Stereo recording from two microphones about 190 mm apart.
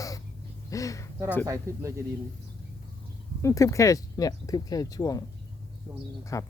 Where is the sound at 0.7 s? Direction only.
15° left (ahead or behind).